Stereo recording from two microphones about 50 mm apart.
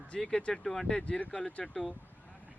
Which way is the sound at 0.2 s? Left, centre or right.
Centre.